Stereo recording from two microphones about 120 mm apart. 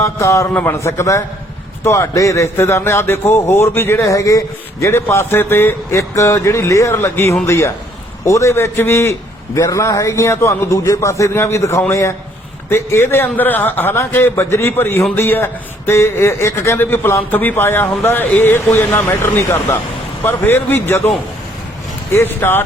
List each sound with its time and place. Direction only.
0.0 s a man's voice: 25° left (ahead or behind)
22.1 s a man's voice: 20° left (ahead or behind)